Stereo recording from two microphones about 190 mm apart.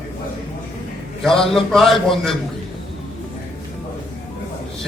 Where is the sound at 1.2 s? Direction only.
Centre (ahead or behind).